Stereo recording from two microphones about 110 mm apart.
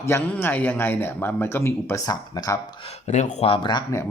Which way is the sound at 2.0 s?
35° left (ahead or behind).